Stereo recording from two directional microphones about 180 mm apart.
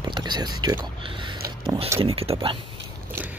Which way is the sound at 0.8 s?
25° right (ahead or behind).